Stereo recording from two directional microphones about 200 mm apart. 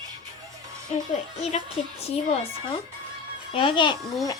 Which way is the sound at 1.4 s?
30° left (ahead or behind).